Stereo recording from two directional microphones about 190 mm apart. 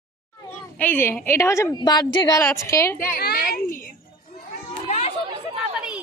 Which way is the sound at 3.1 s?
50° left (ahead or behind).